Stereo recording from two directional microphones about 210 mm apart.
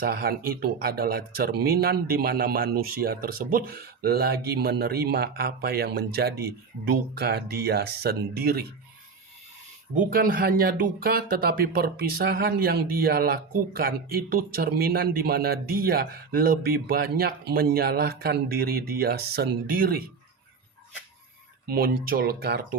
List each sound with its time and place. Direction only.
0.0 s speech: 45° right (ahead or behind)
9.9 s speech: 40° right (ahead or behind)
21.7 s speech: 45° right (ahead or behind)